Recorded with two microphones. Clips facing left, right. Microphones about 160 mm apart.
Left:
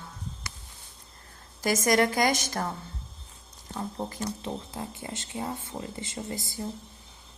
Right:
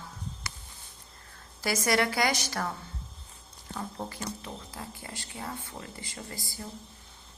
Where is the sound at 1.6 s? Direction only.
45° left (ahead or behind).